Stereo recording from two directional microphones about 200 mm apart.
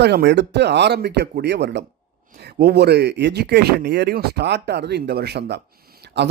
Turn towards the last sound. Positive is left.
turn(degrees=-50)  # may be behind; listen again after turning